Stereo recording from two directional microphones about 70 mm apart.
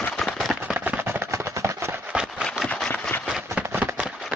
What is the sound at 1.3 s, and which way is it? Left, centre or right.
Chopping, right.